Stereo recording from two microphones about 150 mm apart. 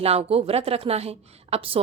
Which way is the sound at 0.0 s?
40° right (ahead or behind).